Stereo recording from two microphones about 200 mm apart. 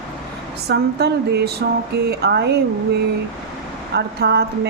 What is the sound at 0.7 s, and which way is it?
Speech, 55° right (ahead or behind).